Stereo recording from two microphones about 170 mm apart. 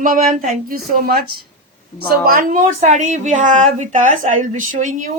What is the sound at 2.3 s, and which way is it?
A woman's voice, 55° right (ahead or behind).